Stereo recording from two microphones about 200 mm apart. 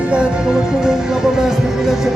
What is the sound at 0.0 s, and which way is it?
Music, 5° right (ahead or behind).